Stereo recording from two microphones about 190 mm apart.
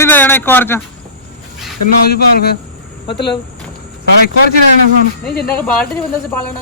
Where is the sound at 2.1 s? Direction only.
55° left (ahead or behind).